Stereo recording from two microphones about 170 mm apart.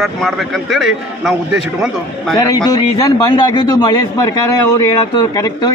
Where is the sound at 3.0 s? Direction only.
25° left (ahead or behind).